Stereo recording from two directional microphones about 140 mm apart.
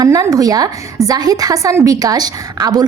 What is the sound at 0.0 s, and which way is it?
A woman's voice, 25° right (ahead or behind).